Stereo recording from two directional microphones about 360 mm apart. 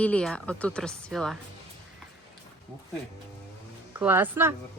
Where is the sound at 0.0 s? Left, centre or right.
Centre.